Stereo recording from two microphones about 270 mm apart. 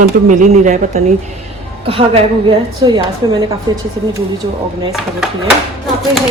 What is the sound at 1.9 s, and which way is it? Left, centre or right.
A woman's voice, right.